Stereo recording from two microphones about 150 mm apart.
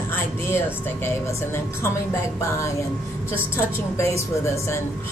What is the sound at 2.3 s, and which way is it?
Speech, 20° left (ahead or behind).